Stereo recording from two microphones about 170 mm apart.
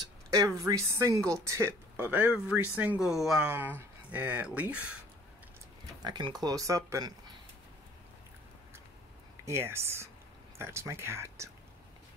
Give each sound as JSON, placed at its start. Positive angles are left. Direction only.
{"t": 0.7, "sound": "speech", "side_deg": -15}
{"t": 6.0, "sound": "speech", "side_deg": -25}
{"t": 9.4, "sound": "speech", "side_deg": -15}